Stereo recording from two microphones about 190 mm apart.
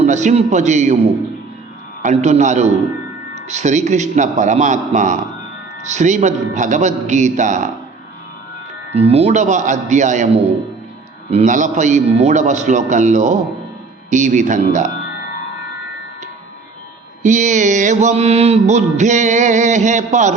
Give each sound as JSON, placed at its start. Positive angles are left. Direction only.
{"t": 0.0, "sound": "mantra", "side_deg": -40}
{"t": 2.0, "sound": "mantra", "side_deg": -40}
{"t": 8.9, "sound": "mantra", "side_deg": -35}
{"t": 17.2, "sound": "mantra", "side_deg": -40}